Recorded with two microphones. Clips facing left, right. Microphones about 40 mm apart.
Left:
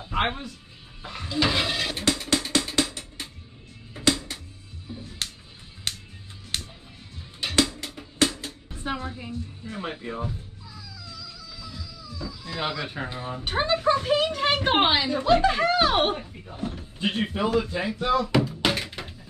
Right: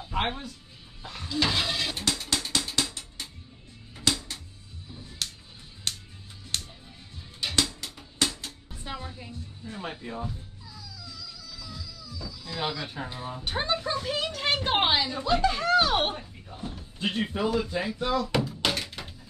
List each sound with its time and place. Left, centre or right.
0.1 s music: left
1.0 s a sound: left
3.9 s music: centre
7.4 s music: centre
8.8 s music: left
9.8 s speech: left
11.6 s music: left
13.7 s speech: left
14.2 s speech: centre
18.3 s a sound: centre